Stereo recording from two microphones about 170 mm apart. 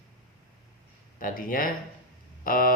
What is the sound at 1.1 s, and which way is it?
Speech, 55° left (ahead or behind).